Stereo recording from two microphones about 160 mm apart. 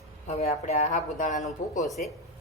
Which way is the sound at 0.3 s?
40° left (ahead or behind).